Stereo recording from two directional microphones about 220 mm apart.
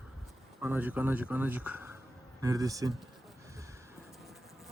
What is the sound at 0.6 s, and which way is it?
Speech, 10° right (ahead or behind).